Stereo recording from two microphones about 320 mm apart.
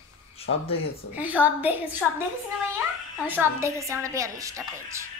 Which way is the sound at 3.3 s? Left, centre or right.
Centre.